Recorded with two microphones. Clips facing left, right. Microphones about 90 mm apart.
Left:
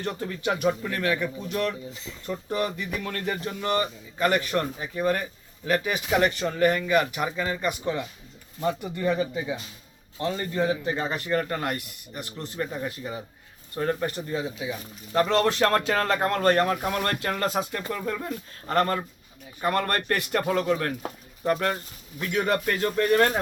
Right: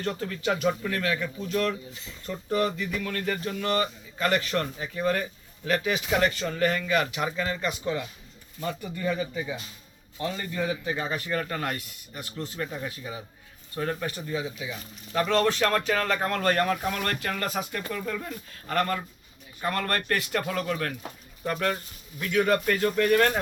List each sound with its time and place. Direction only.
0.0 s a man's voice: 20° left (ahead or behind)
3.0 s speech: 30° left (ahead or behind)
3.2 s a man's voice: 20° left (ahead or behind)
10.3 s a man's voice: 30° left (ahead or behind); by 13.1 s 10° left (ahead or behind)
13.7 s speech: 25° left (ahead or behind)
17.0 s speech: 35° left (ahead or behind)